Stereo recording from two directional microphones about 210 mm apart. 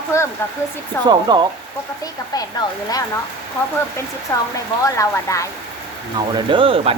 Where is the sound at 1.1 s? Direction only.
20° right (ahead or behind).